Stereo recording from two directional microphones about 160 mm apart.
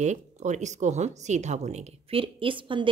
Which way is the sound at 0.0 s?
45° right (ahead or behind).